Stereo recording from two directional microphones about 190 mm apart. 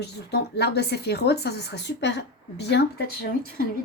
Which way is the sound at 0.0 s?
60° left (ahead or behind).